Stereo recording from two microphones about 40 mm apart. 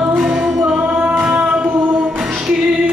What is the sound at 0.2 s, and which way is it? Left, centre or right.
Music, centre.